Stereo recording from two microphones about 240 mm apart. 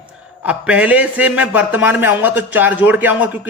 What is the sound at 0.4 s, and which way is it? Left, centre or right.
Speech, centre.